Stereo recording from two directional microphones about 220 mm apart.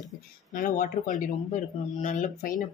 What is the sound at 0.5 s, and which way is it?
Speech, 35° left (ahead or behind).